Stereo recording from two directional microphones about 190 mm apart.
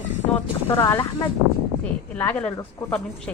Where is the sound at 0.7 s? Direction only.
20° left (ahead or behind).